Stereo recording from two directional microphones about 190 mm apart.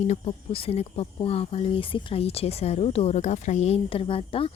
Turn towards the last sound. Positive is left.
turn(degrees=30)  # may be behind; listen again after turning